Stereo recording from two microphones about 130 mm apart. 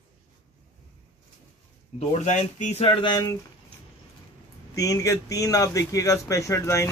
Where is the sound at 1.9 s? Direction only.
60° left (ahead or behind); by 3.1 s 40° left (ahead or behind).